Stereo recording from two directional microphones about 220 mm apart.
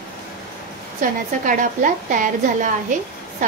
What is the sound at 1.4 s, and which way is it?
A woman's voice, 35° right (ahead or behind).